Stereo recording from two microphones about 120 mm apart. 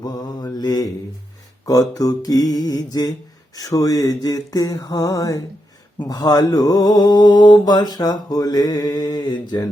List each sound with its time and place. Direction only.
0.0 s mantra: 35° left (ahead or behind)